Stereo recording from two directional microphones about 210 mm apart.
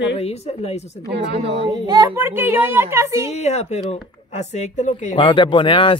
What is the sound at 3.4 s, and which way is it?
Speech, 30° left (ahead or behind).